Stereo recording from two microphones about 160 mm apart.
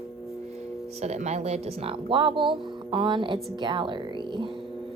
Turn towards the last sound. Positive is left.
turn(degrees=-30)  # may be behind; listen again after turning